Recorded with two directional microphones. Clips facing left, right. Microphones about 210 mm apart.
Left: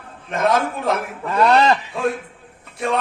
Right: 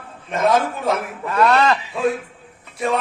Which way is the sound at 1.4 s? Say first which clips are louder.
Left 1 dB; 30° left (ahead or behind).